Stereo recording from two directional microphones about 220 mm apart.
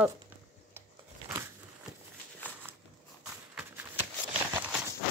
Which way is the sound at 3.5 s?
5° right (ahead or behind).